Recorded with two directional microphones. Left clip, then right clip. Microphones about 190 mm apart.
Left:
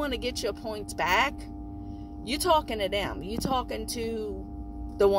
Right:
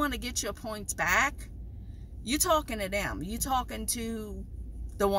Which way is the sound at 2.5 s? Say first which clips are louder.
Left 5 dB; 20° right (ahead or behind).